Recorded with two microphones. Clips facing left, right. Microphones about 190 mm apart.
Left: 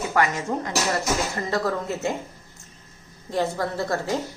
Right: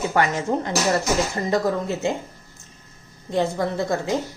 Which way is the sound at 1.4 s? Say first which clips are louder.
Right 4 dB; 15° right (ahead or behind).